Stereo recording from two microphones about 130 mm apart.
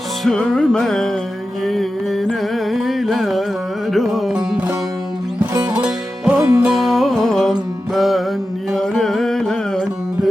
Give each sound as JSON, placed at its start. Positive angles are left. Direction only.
{"t": 0.3, "sound": "music", "side_deg": 5}
{"t": 1.6, "sound": "mantra", "side_deg": 0}
{"t": 2.6, "sound": "carnatic music", "side_deg": 0}
{"t": 3.9, "sound": "music", "side_deg": 0}
{"t": 5.7, "sound": "music", "side_deg": -10}
{"t": 6.4, "sound": "music", "side_deg": -25}
{"t": 6.7, "sound": "music", "side_deg": 0}